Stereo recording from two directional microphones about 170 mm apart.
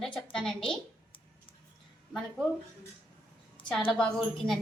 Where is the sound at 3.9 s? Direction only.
5° left (ahead or behind).